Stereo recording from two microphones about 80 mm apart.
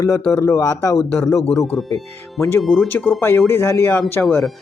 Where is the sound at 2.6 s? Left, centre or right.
Centre.